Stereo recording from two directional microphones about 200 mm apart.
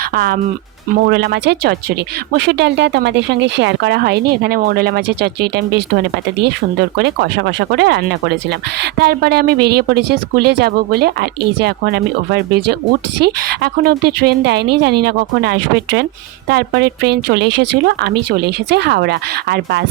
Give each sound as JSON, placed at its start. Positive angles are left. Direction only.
{"t": 0.1, "sound": "speech", "side_deg": -50}